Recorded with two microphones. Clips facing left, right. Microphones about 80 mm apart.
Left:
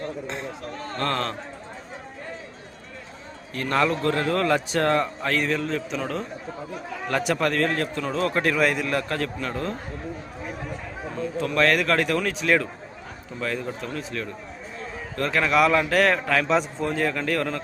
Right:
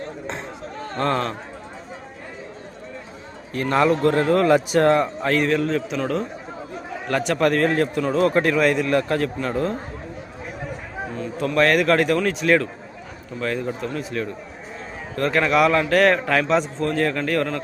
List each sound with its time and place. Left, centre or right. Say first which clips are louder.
0.9 s speech: right 5 dB; centre
3.5 s a man's voice: right 4 dB; centre
11.3 s a man's voice: right 3 dB; centre